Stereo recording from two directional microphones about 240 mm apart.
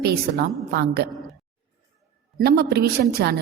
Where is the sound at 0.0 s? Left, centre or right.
Right.